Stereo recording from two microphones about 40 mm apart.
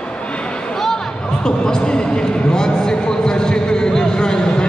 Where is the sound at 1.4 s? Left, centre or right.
Centre.